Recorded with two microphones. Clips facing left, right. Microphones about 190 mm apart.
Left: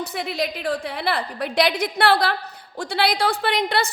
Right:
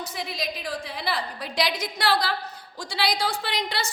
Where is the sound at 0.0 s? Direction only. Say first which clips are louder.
Left 6 dB; 60° left (ahead or behind).